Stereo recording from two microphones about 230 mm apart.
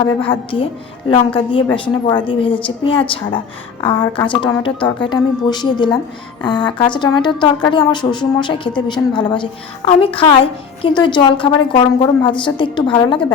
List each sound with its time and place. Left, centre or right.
0.2 s a woman's voice: left